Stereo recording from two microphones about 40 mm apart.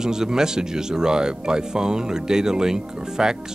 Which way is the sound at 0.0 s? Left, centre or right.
Centre.